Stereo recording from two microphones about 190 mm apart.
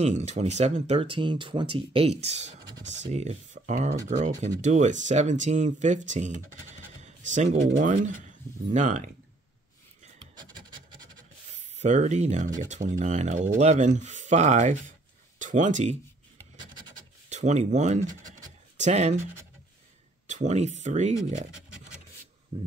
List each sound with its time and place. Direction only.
0.0 s speech: 35° right (ahead or behind)
2.8 s speech: 70° right (ahead or behind)
3.1 s speech: 35° right (ahead or behind)
10.5 s filing: 25° right (ahead or behind)
11.7 s speech: 40° right (ahead or behind)
17.3 s speech: 40° right (ahead or behind)
20.2 s speech: 40° right (ahead or behind)
22.5 s speech: 25° right (ahead or behind)